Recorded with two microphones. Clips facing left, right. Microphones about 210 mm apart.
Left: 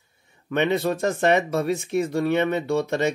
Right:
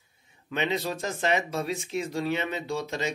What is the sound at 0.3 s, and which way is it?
Speech, 55° left (ahead or behind).